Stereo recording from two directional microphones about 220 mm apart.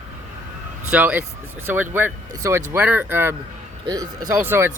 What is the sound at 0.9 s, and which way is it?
Speech, 5° right (ahead or behind).